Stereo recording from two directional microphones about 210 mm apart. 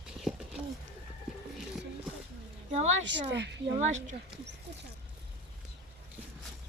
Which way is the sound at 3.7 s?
35° right (ahead or behind).